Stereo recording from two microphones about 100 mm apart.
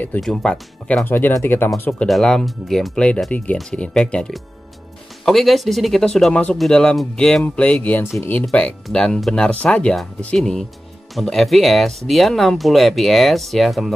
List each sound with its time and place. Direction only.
0.2 s speech: 5° left (ahead or behind)
1.0 s speech: 20° left (ahead or behind)
2.0 s speech: centre (ahead or behind)